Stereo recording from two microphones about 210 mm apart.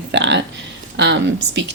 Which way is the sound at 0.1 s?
55° right (ahead or behind).